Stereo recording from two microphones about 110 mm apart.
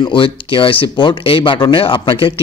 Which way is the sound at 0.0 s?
50° left (ahead or behind).